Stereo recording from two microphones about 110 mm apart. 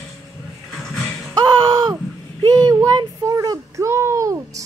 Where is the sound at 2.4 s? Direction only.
40° right (ahead or behind).